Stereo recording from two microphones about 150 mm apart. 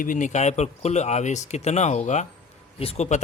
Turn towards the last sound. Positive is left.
turn(degrees=45)  # may be behind; listen again after turning